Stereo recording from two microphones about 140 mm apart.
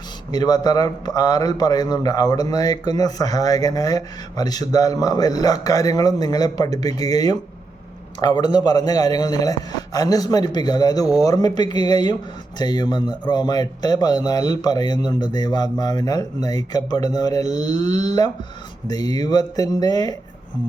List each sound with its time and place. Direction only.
0.3 s a man's voice: 30° left (ahead or behind)